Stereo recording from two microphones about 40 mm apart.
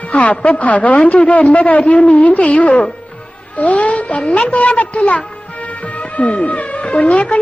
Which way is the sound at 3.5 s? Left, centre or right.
Left.